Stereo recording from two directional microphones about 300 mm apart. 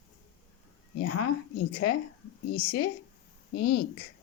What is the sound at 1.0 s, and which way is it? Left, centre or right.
Speech, left.